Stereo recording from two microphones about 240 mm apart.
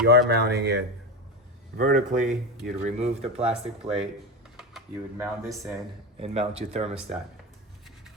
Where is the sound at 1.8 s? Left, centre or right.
Right.